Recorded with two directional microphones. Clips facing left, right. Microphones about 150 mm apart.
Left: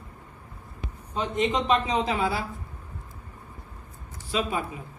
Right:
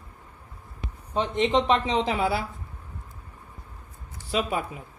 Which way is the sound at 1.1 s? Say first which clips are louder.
Right 3 dB; 25° right (ahead or behind).